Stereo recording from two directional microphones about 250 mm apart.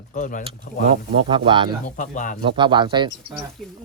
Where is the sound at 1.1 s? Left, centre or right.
Centre.